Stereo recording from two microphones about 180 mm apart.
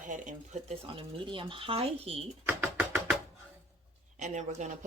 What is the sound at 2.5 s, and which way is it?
Music, 10° right (ahead or behind).